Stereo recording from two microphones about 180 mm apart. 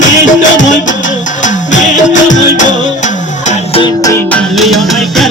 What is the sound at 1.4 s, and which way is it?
Music, 45° left (ahead or behind).